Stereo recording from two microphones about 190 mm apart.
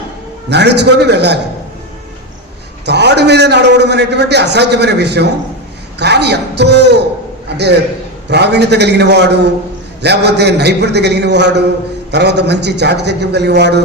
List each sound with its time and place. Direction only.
0.5 s a man's voice: 65° right (ahead or behind)
2.8 s a man's voice: 65° right (ahead or behind)
8.3 s a man's voice: 60° right (ahead or behind)